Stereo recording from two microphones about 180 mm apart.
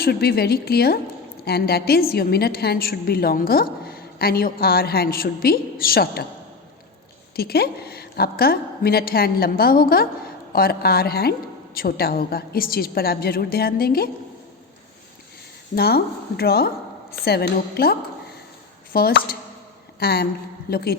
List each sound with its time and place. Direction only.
0.0 s a woman's voice: 60° left (ahead or behind)
7.3 s a woman's voice: 60° left (ahead or behind)
15.7 s a woman's voice: 60° left (ahead or behind)
18.9 s a woman's voice: 60° left (ahead or behind)